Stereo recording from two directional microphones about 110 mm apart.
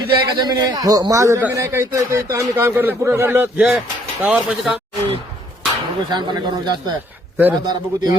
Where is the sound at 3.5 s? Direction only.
5° right (ahead or behind).